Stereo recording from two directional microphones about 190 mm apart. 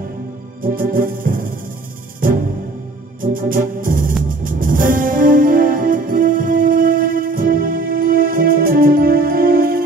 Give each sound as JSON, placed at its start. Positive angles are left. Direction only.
{"t": 0.6, "sound": "music", "side_deg": -50}
{"t": 3.2, "sound": "organ", "side_deg": -45}
{"t": 4.3, "sound": "music", "side_deg": -45}